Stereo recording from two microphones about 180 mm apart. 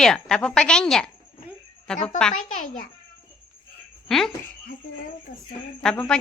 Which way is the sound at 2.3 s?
45° left (ahead or behind).